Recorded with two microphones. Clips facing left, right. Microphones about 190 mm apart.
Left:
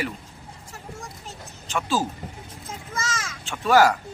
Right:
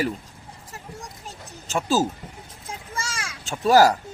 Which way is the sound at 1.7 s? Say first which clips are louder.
Right 3 dB; 40° right (ahead or behind).